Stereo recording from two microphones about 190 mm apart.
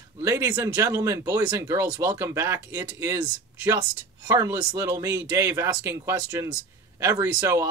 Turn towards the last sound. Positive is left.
turn(degrees=-15)  # may be behind; listen again after turning